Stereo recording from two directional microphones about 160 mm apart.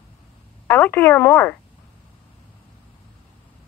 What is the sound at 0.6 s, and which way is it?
Speech, 10° left (ahead or behind).